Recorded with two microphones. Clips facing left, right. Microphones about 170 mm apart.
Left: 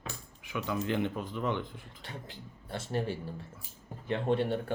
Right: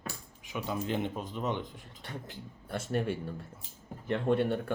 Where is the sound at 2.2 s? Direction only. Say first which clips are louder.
Right 2 dB; 50° right (ahead or behind).